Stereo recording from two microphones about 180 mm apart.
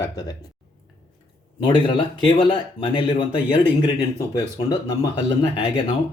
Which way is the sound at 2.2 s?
25° left (ahead or behind).